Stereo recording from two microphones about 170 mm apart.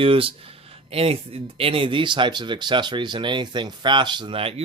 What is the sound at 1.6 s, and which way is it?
Speech, 30° right (ahead or behind).